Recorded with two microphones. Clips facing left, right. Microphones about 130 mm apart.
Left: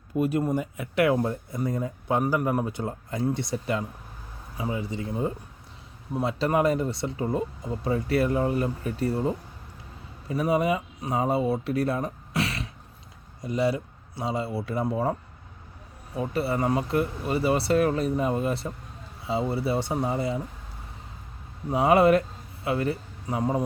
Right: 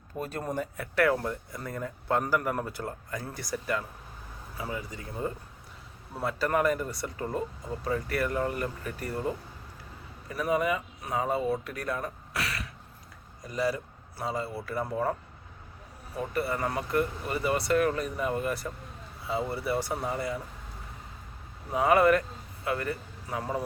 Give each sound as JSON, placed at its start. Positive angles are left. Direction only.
{"t": 0.2, "sound": "speech", "side_deg": 10}
{"t": 16.3, "sound": "speech", "side_deg": 30}
{"t": 21.7, "sound": "a man's voice", "side_deg": 25}